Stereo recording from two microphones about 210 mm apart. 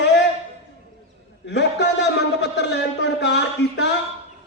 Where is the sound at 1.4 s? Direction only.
55° left (ahead or behind).